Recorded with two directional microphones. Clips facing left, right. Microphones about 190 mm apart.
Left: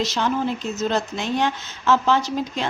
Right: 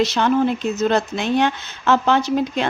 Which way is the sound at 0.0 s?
60° right (ahead or behind).